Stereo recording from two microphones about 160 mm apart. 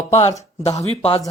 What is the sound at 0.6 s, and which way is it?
Speech, 40° left (ahead or behind).